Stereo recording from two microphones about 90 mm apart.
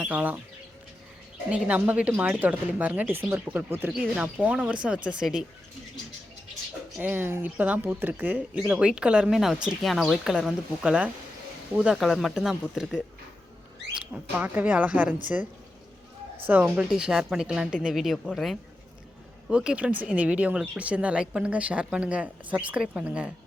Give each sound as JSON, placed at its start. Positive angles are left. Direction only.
{"t": 0.0, "sound": "speech", "side_deg": -15}
{"t": 1.5, "sound": "speech", "side_deg": -15}
{"t": 4.1, "sound": "speech", "side_deg": -15}
{"t": 7.0, "sound": "speech", "side_deg": -20}
{"t": 16.5, "sound": "speech", "side_deg": -20}
{"t": 16.9, "sound": "speech", "side_deg": -5}
{"t": 19.5, "sound": "speech", "side_deg": -10}